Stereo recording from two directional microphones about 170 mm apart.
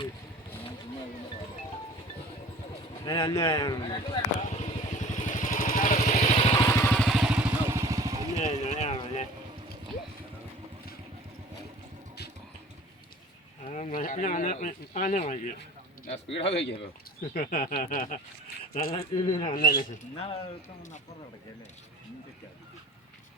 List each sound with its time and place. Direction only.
3.0 s speech: 20° left (ahead or behind)
4.4 s vehicle: 40° left (ahead or behind)
6.6 s vehicle: 15° left (ahead or behind); by 7.4 s 5° right (ahead or behind)
7.7 s vehicle: 20° right (ahead or behind)
8.4 s a sound: 40° left (ahead or behind)
13.7 s speech: 50° left (ahead or behind)
16.3 s speech: 90° left
17.3 s speech: 50° left (ahead or behind)
18.9 s speech: 30° left (ahead or behind)
19.5 s speech: 60° left (ahead or behind)
20.1 s speech: 35° left (ahead or behind)